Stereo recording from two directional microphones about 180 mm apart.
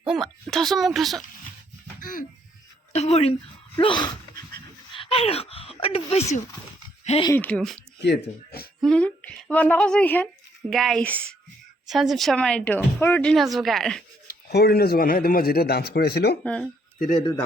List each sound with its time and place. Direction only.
0.0 s speech: centre (ahead or behind)
2.0 s speech: 50° left (ahead or behind)
2.9 s speech: 35° left (ahead or behind)
3.8 s dog: 25° left (ahead or behind)
7.0 s speech: 35° left (ahead or behind)
7.3 s speech: 5° left (ahead or behind)
8.0 s speech: 65° left (ahead or behind)
8.8 s a woman's voice: 5° left (ahead or behind)
14.3 s speech: 60° left (ahead or behind)
16.4 s speech: 5° left (ahead or behind)